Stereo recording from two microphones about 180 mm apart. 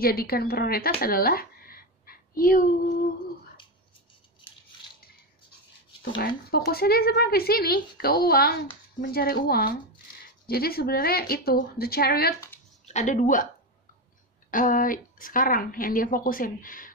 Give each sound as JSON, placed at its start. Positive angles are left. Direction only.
{"t": 0.0, "sound": "a woman's voice", "side_deg": 55}
{"t": 6.1, "sound": "speech", "side_deg": 55}
{"t": 12.8, "sound": "speech", "side_deg": 40}
{"t": 14.5, "sound": "a woman's voice", "side_deg": 50}